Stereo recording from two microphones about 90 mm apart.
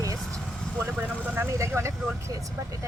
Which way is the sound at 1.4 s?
30° right (ahead or behind).